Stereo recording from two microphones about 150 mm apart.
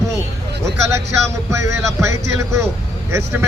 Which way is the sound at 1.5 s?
20° right (ahead or behind).